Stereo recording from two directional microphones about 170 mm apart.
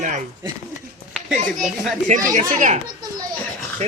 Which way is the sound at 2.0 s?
45° right (ahead or behind).